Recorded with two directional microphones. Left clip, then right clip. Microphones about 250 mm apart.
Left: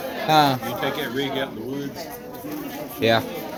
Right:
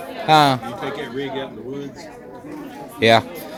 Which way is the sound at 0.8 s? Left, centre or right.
Centre.